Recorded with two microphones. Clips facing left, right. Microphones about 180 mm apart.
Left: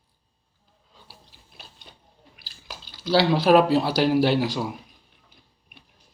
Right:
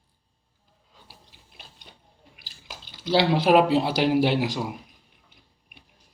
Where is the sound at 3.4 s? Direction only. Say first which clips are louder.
Left 1 dB; 15° right (ahead or behind).